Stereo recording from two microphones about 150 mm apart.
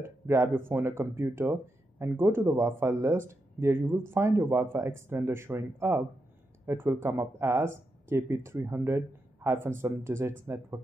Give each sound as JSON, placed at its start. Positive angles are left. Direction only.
{"t": 0.0, "sound": "speech", "side_deg": -15}